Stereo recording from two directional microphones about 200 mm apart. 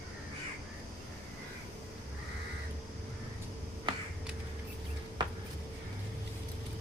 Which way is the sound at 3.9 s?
25° right (ahead or behind).